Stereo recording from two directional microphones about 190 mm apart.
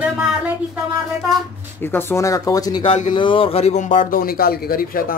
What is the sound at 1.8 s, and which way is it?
A woman's voice, 10° left (ahead or behind).